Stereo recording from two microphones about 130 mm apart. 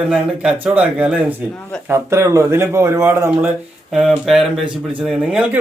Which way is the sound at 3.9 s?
Centre (ahead or behind).